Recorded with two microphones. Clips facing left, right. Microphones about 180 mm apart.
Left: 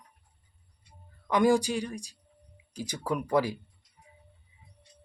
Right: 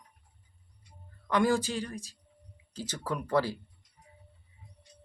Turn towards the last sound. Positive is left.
turn(degrees=15)  # may be behind; listen again after turning